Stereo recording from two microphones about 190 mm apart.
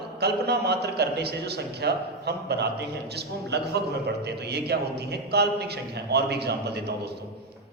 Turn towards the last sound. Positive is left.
turn(degrees=-60)  # may be behind; listen again after turning